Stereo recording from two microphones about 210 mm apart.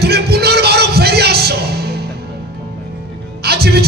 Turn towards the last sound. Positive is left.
turn(degrees=-50)  # may be behind; listen again after turning